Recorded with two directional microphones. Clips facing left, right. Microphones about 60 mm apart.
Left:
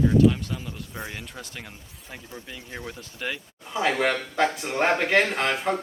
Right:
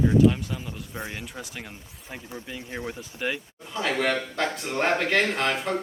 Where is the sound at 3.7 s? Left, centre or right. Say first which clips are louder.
Left 2 dB; centre.